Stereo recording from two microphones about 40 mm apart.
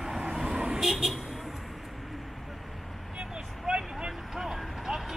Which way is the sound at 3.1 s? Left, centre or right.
Right.